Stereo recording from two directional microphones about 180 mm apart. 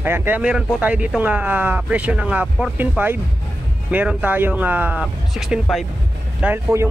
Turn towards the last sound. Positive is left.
turn(degrees=-10)  # may be behind; listen again after turning